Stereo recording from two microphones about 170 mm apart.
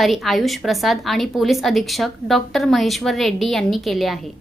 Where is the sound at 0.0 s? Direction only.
Centre (ahead or behind).